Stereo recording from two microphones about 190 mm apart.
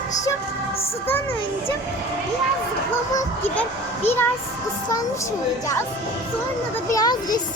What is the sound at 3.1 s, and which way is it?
Speech, 10° left (ahead or behind).